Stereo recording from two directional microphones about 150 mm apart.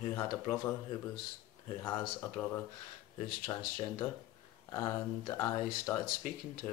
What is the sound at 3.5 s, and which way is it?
Speech, 20° left (ahead or behind).